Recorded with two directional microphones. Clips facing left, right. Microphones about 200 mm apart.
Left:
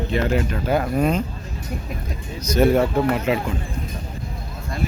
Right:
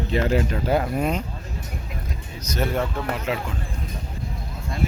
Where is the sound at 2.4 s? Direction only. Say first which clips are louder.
Left 8 dB; 10° left (ahead or behind).